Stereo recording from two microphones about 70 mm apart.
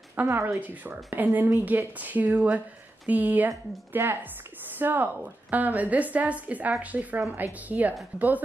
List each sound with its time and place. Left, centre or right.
0.3 s a woman's voice: right
0.6 s a woman's voice: right
3.4 s a woman's voice: right